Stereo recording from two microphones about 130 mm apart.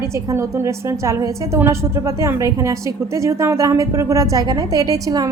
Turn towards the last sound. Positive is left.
turn(degrees=-30)  # may be behind; listen again after turning